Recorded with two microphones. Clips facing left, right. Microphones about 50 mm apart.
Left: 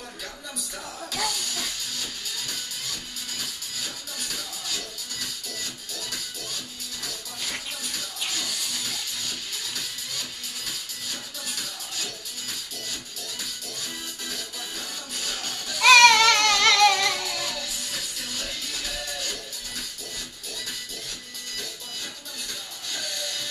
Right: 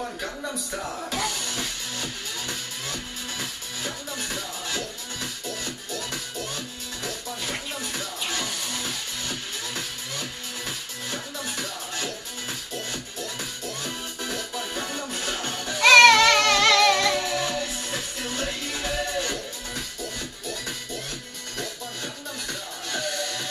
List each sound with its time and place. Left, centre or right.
1.1 s music: right
14.2 s music: right
15.8 s music: centre
17.1 s music: right
22.8 s music: right